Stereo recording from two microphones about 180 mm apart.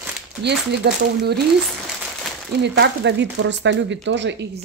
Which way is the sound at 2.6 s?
75° right (ahead or behind).